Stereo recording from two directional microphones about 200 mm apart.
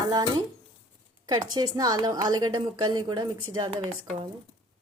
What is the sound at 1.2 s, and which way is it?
A woman's voice, 20° right (ahead or behind).